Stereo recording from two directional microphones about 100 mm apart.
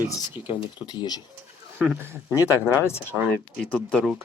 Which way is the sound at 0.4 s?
50° left (ahead or behind).